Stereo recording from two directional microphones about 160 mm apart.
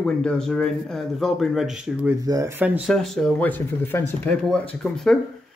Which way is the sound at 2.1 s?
20° right (ahead or behind).